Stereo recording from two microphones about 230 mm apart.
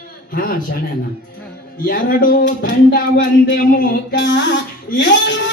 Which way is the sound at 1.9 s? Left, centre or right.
Left.